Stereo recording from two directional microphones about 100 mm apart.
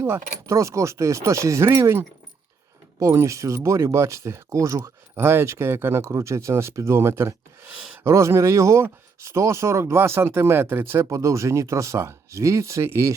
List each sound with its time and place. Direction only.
0.0 s speech: 30° right (ahead or behind)